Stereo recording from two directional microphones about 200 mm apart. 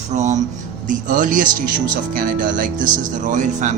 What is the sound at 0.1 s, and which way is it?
Speech, 35° right (ahead or behind).